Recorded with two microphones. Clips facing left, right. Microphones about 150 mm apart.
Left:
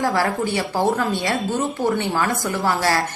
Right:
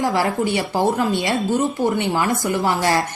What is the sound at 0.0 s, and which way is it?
A woman's voice, 20° right (ahead or behind).